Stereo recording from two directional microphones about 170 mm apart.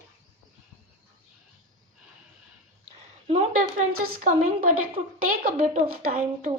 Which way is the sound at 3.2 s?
40° right (ahead or behind).